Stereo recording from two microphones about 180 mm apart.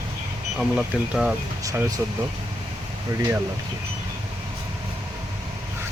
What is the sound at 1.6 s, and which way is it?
Speech, 20° right (ahead or behind).